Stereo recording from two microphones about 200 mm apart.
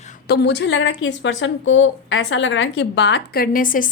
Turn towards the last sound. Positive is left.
turn(degrees=40)  # may be behind; listen again after turning